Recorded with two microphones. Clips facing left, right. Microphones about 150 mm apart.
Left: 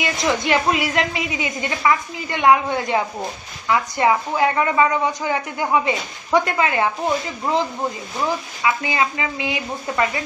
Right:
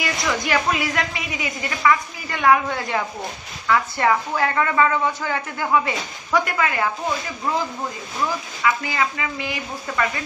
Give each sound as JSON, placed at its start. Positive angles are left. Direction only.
{"t": 0.0, "sound": "a woman's voice", "side_deg": 20}
{"t": 8.6, "sound": "a woman's voice", "side_deg": 20}